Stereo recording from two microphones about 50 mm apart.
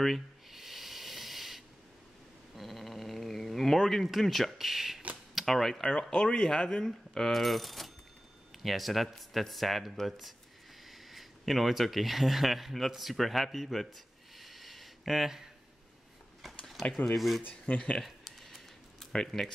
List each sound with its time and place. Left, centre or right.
0.0 s a sound: centre
2.5 s dog: centre
5.3 s speech: centre
5.9 s mechanisms: centre
8.6 s speech: centre
16.4 s a sound: centre
16.9 s speech: centre
17.5 s speech: left
18.0 s a sound: centre